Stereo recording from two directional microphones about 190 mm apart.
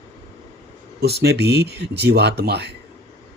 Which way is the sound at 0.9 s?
60° right (ahead or behind).